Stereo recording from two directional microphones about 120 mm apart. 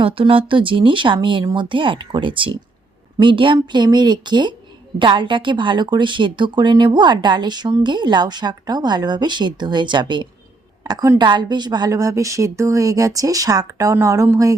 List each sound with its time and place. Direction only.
0.0 s a woman's voice: 50° right (ahead or behind); by 14.5 s 25° right (ahead or behind)